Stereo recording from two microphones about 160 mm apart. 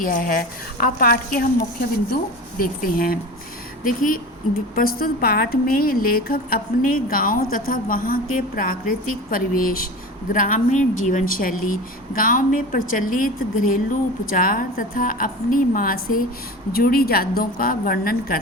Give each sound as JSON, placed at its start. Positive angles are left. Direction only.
{"t": 0.0, "sound": "a woman's voice", "side_deg": 60}
{"t": 2.6, "sound": "a woman's voice", "side_deg": 65}